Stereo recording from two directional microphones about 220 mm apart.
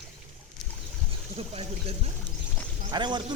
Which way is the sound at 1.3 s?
25° right (ahead or behind).